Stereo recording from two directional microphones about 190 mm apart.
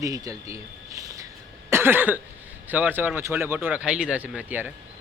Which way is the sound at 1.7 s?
10° right (ahead or behind).